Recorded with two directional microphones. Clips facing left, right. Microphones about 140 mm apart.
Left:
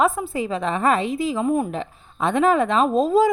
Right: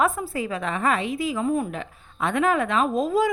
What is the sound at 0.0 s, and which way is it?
A woman's voice, 20° left (ahead or behind).